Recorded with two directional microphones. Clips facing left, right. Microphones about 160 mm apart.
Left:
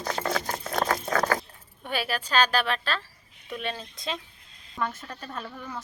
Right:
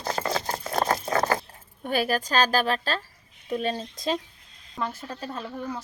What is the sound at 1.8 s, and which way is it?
Speech, 40° right (ahead or behind).